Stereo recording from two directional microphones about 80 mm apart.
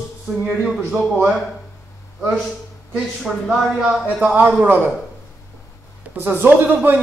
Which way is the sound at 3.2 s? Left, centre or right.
Centre.